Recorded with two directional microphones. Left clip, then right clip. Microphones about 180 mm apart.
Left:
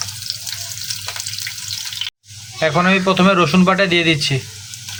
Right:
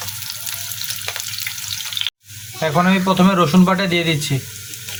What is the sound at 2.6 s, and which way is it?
A man's voice, 5° left (ahead or behind).